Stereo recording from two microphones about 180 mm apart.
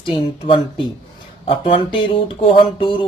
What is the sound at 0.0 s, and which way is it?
Speech, 30° left (ahead or behind).